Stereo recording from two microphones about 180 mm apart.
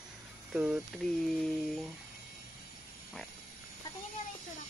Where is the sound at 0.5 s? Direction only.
5° right (ahead or behind).